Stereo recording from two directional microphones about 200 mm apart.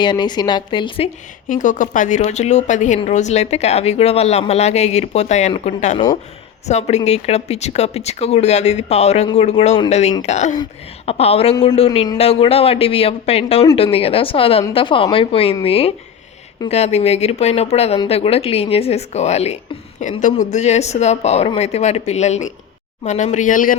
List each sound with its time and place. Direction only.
0.0 s speech: 20° left (ahead or behind)
1.5 s a woman's voice: 40° left (ahead or behind)